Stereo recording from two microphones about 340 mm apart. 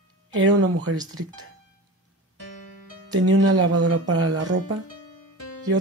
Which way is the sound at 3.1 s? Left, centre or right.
Right.